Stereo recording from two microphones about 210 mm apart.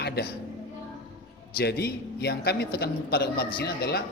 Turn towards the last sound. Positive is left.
turn(degrees=50)  # may be behind; listen again after turning